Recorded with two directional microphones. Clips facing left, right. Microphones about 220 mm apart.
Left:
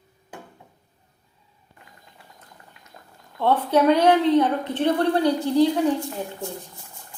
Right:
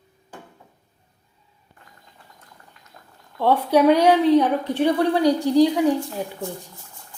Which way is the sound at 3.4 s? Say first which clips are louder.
Right 2 dB; 10° right (ahead or behind).